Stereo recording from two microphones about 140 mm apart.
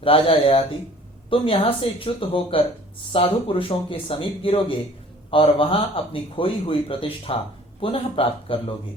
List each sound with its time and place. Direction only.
0.0 s speech: 40° left (ahead or behind)